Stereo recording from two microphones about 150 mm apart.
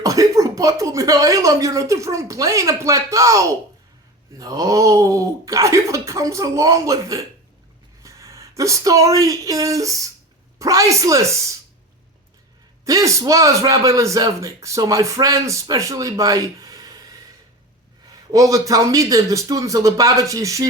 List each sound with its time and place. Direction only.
0.0 s a man's voice: 20° right (ahead or behind)
12.8 s a man's voice: 20° right (ahead or behind)